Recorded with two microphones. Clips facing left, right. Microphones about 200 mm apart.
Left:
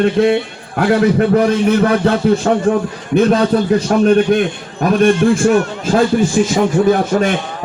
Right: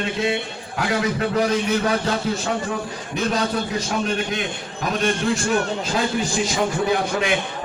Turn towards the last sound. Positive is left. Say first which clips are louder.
# left 8 dB
turn(degrees=45)  # may be behind; listen again after turning